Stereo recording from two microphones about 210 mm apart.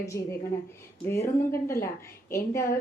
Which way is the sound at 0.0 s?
15° left (ahead or behind).